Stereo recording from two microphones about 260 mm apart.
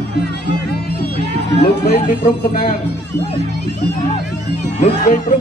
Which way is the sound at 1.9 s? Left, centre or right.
Left.